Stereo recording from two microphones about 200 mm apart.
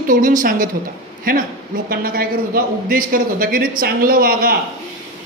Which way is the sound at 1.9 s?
50° right (ahead or behind).